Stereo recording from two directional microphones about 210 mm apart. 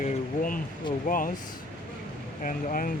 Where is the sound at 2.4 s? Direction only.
40° left (ahead or behind).